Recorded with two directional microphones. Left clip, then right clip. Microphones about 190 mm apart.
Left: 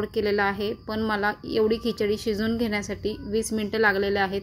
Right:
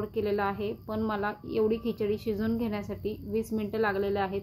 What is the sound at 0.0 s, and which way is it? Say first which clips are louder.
A woman's voice: left 5 dB; 25° left (ahead or behind).